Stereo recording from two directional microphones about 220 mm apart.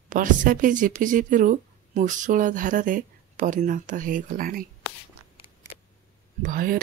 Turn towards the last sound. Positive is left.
turn(degrees=-40)  # may be behind; listen again after turning